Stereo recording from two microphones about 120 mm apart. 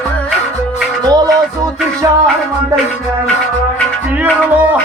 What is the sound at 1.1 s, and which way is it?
Music, 30° right (ahead or behind).